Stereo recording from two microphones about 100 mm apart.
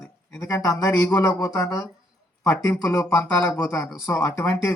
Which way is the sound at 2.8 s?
10° left (ahead or behind).